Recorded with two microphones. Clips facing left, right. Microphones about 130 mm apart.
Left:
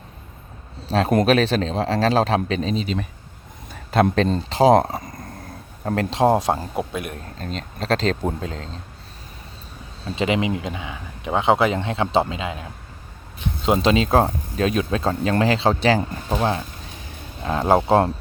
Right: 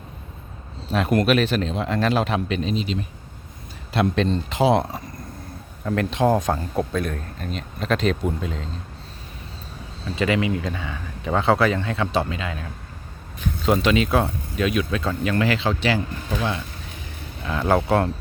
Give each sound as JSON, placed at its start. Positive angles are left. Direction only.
{"t": 0.9, "sound": "speech", "side_deg": 35}
{"t": 3.9, "sound": "speech", "side_deg": 40}
{"t": 6.7, "sound": "a man's voice", "side_deg": 15}
{"t": 7.3, "sound": "speech", "side_deg": 35}
{"t": 10.2, "sound": "speech", "side_deg": 20}
{"t": 13.4, "sound": "a sound", "side_deg": 20}
{"t": 13.7, "sound": "speech", "side_deg": 30}